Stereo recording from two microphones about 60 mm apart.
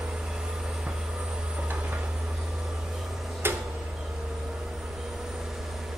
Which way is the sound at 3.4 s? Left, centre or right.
Right.